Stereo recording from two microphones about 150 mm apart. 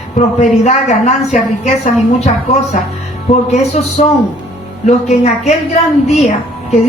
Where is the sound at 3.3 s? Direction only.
45° left (ahead or behind).